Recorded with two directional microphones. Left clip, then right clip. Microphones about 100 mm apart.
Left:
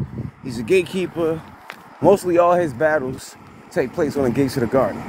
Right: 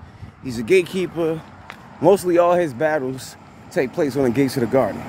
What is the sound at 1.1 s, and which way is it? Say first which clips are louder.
Speech: left 1 dB; 40° right (ahead or behind).